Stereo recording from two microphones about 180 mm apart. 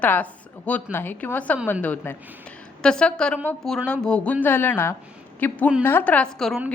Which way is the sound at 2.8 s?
5° left (ahead or behind).